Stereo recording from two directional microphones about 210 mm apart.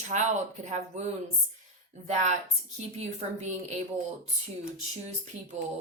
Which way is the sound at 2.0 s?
35° right (ahead or behind).